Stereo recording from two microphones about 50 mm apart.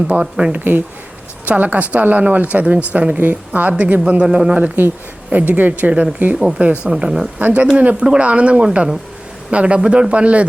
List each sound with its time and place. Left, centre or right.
0.1 s speech: centre
0.5 s speech: right
4.2 s a man's voice: centre
5.3 s a man's voice: right
6.9 s speech: centre
7.3 s a man's voice: right